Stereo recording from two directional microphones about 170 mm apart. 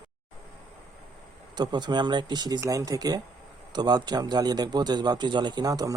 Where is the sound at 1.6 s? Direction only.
25° right (ahead or behind).